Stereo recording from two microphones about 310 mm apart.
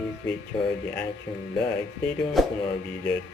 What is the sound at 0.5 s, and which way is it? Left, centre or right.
Female singing, centre.